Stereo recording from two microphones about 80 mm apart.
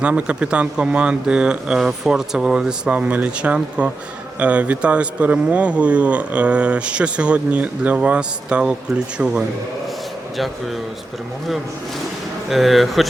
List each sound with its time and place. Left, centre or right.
0.0 s a man's voice: centre
12.5 s speech: centre